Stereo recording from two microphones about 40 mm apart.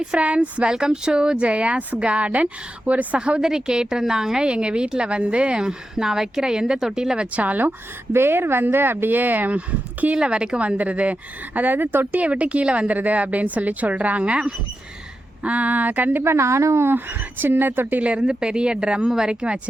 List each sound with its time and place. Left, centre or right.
0.2 s a woman's voice: right
0.7 s a woman's voice: centre; by 3.2 s right
3.2 s a woman's voice: right
7.3 s a woman's voice: right
8.1 s a woman's voice: right
9.5 s a woman's voice: right
10.2 s a woman's voice: right
10.8 s a woman's voice: right
11.6 s speech: right
12.2 s a woman's voice: right
12.9 s a woman's voice: right
15.4 s speech: right
16.2 s speech: right
18.2 s a woman's voice: right